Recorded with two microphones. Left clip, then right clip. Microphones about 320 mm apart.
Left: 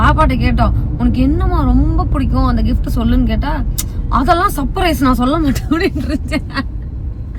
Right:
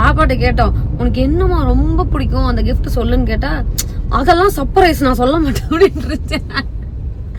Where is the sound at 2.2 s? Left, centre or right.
Centre.